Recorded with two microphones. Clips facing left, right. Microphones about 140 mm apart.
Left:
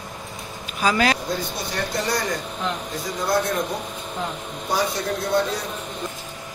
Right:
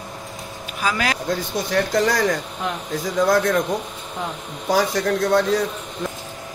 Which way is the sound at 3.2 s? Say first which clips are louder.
Right 3 dB; 90° right.